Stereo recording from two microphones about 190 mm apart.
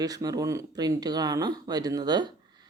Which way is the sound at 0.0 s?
20° right (ahead or behind).